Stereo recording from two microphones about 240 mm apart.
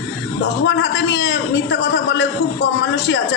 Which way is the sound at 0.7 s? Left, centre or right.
Left.